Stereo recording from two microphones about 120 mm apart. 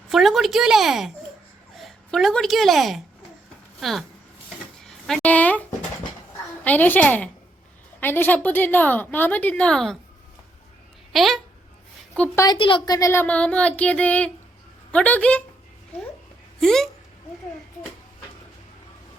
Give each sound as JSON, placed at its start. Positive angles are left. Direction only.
{"t": 0.1, "sound": "a woman's voice", "side_deg": 0}
{"t": 5.0, "sound": "a woman's voice", "side_deg": 5}
{"t": 6.7, "sound": "a woman's voice", "side_deg": 15}
{"t": 11.1, "sound": "speech", "side_deg": 0}
{"t": 12.5, "sound": "speech", "side_deg": 45}
{"t": 13.2, "sound": "a woman's voice", "side_deg": 10}
{"t": 16.6, "sound": "speech", "side_deg": 5}